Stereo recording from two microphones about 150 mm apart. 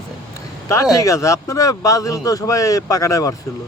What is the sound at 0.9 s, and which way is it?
Speech, 20° left (ahead or behind).